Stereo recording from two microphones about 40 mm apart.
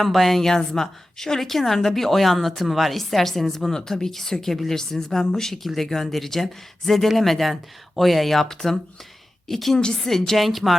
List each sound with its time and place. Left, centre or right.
0.0 s a woman's voice: centre
9.7 s speech: centre
10.1 s a woman's voice: centre